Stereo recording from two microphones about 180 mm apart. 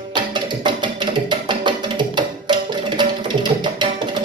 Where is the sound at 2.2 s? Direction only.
25° right (ahead or behind).